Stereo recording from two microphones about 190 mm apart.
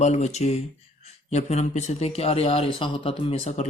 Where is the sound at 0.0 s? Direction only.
35° left (ahead or behind).